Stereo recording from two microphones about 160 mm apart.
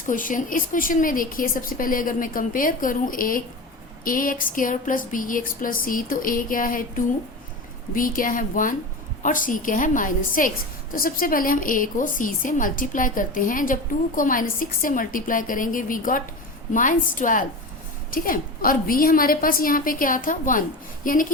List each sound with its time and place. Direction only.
0.0 s a woman's voice: 55° left (ahead or behind)